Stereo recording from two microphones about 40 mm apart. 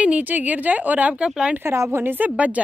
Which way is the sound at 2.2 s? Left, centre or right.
Right.